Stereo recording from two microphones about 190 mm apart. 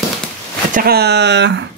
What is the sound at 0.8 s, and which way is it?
Speech, 55° right (ahead or behind).